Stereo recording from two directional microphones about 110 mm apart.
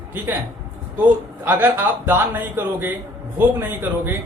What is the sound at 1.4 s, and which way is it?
Speech, 15° right (ahead or behind).